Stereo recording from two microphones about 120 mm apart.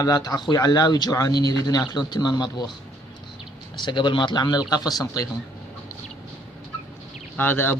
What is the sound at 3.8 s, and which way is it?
Speech, 40° left (ahead or behind).